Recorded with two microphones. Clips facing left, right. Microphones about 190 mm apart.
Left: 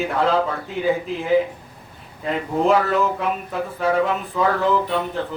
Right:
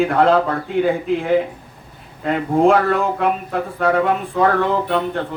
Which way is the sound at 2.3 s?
55° right (ahead or behind).